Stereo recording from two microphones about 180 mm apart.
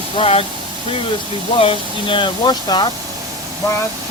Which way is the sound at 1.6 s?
30° left (ahead or behind).